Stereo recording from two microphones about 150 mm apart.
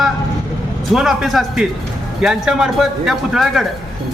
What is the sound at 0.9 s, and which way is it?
A man's voice, 5° right (ahead or behind).